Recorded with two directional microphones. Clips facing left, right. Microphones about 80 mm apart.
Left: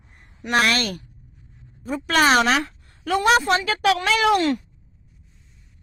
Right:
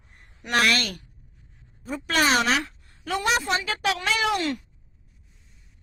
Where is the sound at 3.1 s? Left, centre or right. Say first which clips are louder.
Left 7 dB; left.